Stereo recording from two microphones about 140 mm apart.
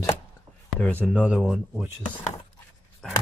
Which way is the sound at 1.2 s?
5° right (ahead or behind).